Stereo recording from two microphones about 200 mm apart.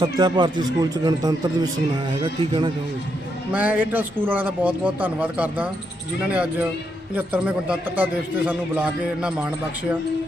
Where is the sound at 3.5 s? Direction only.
5° right (ahead or behind).